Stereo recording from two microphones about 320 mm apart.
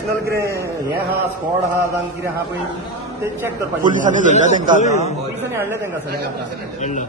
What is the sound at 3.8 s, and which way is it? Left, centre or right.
Speech, right.